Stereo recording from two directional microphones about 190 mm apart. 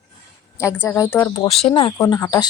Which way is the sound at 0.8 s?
15° left (ahead or behind).